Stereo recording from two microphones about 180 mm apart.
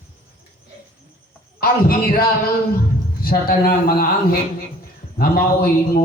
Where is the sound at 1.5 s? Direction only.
55° left (ahead or behind).